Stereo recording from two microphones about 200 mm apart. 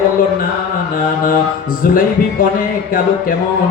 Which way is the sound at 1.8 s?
45° left (ahead or behind).